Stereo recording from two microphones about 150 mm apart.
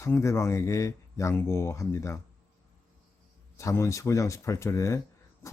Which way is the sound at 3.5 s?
20° left (ahead or behind).